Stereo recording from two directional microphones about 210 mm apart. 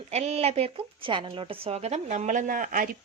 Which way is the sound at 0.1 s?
30° right (ahead or behind).